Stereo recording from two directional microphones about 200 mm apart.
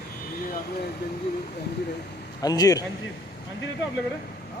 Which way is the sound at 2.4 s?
20° left (ahead or behind).